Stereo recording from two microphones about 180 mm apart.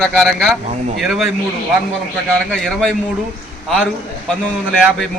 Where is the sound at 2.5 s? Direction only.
5° left (ahead or behind).